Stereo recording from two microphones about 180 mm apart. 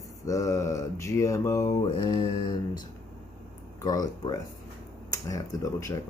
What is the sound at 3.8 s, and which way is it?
Speech, 20° left (ahead or behind).